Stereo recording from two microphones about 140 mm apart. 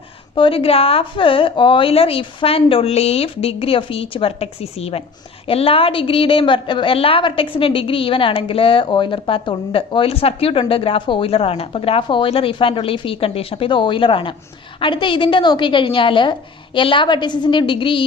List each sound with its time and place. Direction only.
0.3 s a woman's voice: 40° left (ahead or behind)